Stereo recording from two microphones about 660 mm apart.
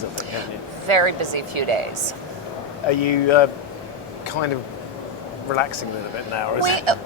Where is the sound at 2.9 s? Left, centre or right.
Left.